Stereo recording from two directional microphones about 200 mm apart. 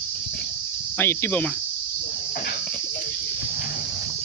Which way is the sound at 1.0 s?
10° left (ahead or behind).